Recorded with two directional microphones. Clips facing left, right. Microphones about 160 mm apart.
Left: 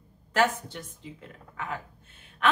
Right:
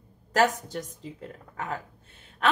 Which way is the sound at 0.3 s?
40° right (ahead or behind).